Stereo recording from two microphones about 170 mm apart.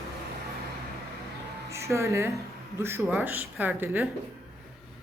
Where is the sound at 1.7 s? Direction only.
15° right (ahead or behind).